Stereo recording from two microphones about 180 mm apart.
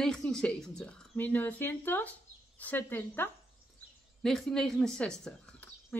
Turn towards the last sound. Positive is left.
turn(degrees=5)  # may be behind; listen again after turning